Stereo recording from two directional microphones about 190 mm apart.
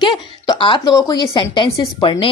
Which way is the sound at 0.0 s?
25° left (ahead or behind).